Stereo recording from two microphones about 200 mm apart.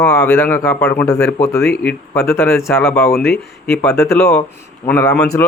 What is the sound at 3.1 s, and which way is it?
Speech, 55° left (ahead or behind).